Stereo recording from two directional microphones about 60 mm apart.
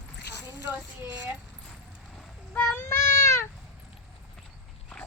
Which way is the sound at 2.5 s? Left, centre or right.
Left.